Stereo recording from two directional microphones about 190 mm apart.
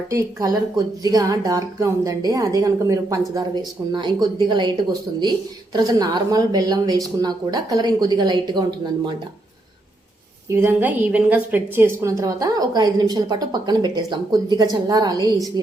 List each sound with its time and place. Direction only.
0.1 s a woman's voice: 20° right (ahead or behind)
10.5 s a woman's voice: 10° right (ahead or behind)